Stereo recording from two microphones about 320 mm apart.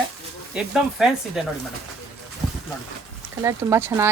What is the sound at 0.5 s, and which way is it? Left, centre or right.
Speech, centre.